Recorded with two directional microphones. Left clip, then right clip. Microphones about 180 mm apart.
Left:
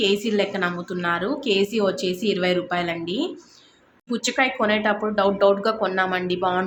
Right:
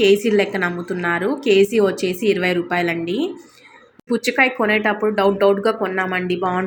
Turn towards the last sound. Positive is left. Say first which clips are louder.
# right 2 dB
turn(degrees=-10)  # may be behind; listen again after turning